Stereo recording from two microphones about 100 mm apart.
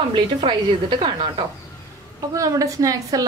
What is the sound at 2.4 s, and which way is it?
Speech, 35° right (ahead or behind).